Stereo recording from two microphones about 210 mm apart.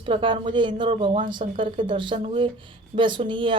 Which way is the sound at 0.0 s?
25° right (ahead or behind).